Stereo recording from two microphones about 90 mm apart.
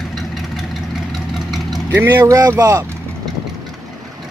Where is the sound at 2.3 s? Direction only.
40° right (ahead or behind).